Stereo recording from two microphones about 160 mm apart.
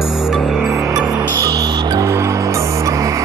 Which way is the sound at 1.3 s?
25° right (ahead or behind).